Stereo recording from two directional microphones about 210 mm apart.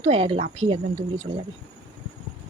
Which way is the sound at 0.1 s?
30° right (ahead or behind).